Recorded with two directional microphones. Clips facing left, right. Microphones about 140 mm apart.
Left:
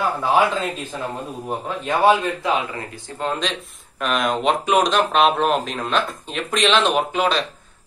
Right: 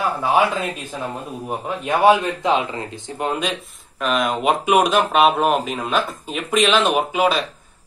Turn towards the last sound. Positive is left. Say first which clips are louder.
# right 1 dB
turn(degrees=-5)  # may be behind; listen again after turning